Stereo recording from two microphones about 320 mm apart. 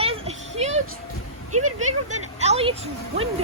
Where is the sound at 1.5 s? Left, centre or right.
Right.